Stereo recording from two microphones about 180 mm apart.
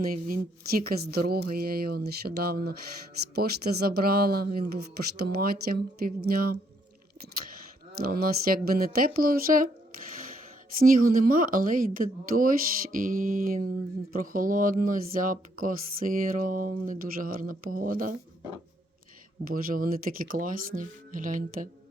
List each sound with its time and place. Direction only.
0.0 s speech: 50° right (ahead or behind)
7.9 s speech: 55° right (ahead or behind)
10.8 s speech: 50° right (ahead or behind)
19.5 s speech: 55° right (ahead or behind)